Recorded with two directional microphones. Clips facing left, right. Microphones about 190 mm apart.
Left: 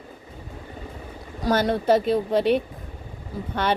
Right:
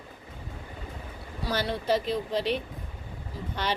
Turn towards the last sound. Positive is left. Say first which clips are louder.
# left 5 dB
turn(degrees=50)  # may be behind; listen again after turning